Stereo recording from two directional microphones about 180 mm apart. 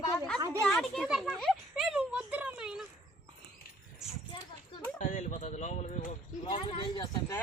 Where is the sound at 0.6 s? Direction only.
Centre (ahead or behind).